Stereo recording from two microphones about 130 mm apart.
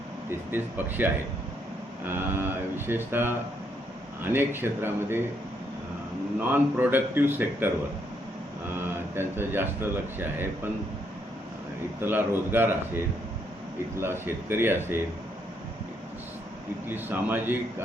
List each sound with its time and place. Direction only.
0.3 s speech: 15° right (ahead or behind)
6.5 s speech: 15° right (ahead or behind)
9.1 s speech: 15° right (ahead or behind)
12.0 s speech: 15° right (ahead or behind)
14.0 s speech: 20° right (ahead or behind)
16.9 s speech: 15° right (ahead or behind)